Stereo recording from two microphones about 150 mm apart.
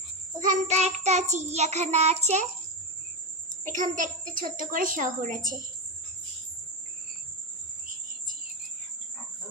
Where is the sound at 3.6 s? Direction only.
60° right (ahead or behind).